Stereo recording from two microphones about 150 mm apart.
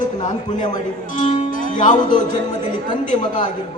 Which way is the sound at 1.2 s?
55° left (ahead or behind).